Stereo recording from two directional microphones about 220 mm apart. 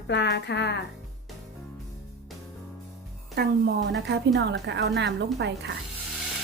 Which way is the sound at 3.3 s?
50° right (ahead or behind).